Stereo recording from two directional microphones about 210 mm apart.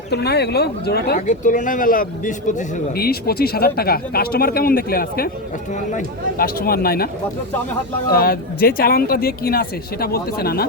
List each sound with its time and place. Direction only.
0.1 s speech: 50° left (ahead or behind)
8.1 s speech: 45° left (ahead or behind)